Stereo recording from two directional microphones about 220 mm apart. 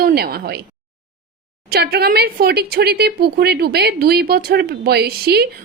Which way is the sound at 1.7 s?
45° right (ahead or behind).